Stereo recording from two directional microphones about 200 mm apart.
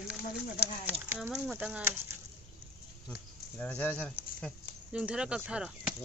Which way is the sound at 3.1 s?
5° left (ahead or behind).